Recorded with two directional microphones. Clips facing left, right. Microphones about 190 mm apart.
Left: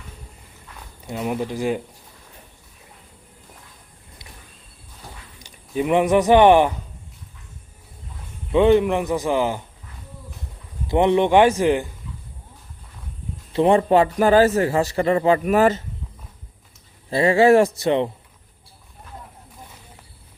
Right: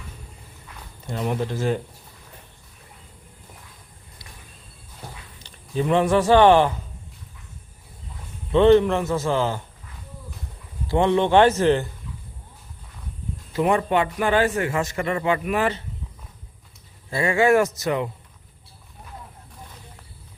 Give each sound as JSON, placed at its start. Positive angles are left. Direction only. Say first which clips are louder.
{"t": 1.0, "sound": "a man's voice", "louder": "left 1 dB", "side_deg": 5}
{"t": 5.4, "sound": "speech", "louder": "left 2 dB", "side_deg": 15}
{"t": 8.5, "sound": "a man's voice", "louder": "even", "side_deg": 10}
{"t": 10.8, "sound": "a man's voice", "louder": "left 2 dB", "side_deg": 20}
{"t": 13.5, "sound": "a man's voice", "louder": "left 5 dB", "side_deg": 30}
{"t": 17.1, "sound": "a man's voice", "louder": "left 4 dB", "side_deg": 30}